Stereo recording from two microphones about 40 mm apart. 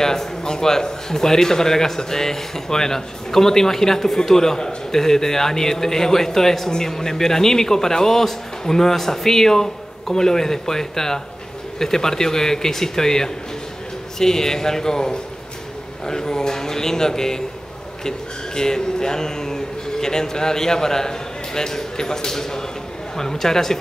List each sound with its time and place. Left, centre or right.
0.0 s a man's voice: centre